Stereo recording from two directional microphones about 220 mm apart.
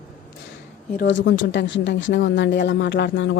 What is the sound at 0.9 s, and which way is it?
Speech, 55° left (ahead or behind).